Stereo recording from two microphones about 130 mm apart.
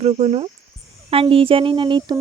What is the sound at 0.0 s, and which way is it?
Speech, 55° right (ahead or behind).